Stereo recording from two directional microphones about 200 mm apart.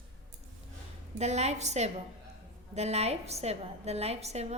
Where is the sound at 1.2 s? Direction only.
35° right (ahead or behind).